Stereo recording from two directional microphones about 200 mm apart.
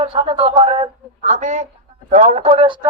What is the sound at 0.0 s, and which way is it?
A man's voice, 25° right (ahead or behind).